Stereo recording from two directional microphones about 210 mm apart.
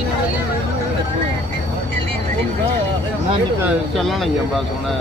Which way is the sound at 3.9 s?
Centre (ahead or behind).